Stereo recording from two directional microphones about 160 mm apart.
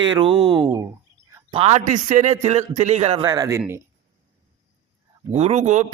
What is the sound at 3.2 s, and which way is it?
Speech, 25° right (ahead or behind).